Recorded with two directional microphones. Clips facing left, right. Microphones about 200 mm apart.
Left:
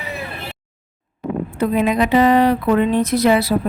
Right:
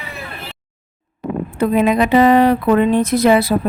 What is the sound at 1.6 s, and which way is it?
A woman's voice, 55° right (ahead or behind).